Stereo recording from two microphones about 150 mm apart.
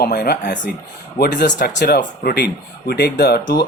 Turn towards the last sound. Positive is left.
turn(degrees=90)